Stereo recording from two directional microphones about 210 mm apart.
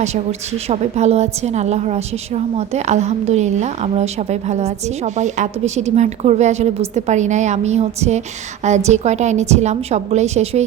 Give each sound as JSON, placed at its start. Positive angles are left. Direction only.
{"t": 0.0, "sound": "a woman's voice", "side_deg": -30}